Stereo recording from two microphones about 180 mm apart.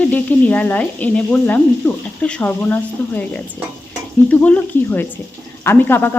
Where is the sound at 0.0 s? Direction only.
10° left (ahead or behind).